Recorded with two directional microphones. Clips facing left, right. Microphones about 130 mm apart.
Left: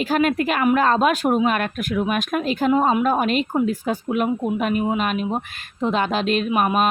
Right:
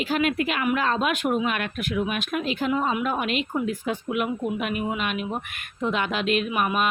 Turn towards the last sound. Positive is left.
turn(degrees=40)  # may be behind; listen again after turning